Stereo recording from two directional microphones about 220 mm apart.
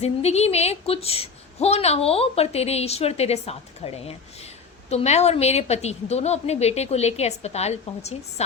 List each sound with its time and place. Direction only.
0.0 s a woman's voice: 30° left (ahead or behind)